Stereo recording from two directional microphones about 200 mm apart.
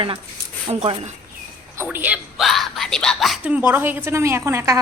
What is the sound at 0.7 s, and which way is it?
Speech, 30° right (ahead or behind).